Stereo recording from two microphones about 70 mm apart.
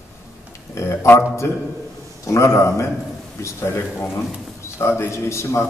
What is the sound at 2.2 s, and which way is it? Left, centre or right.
A man's voice, left.